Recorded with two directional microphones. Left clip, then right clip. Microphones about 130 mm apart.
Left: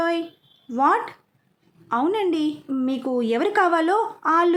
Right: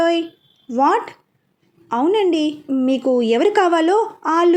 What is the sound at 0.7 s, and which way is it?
A woman's voice, 20° right (ahead or behind).